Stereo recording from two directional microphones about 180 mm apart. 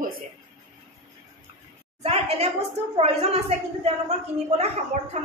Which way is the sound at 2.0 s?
35° right (ahead or behind).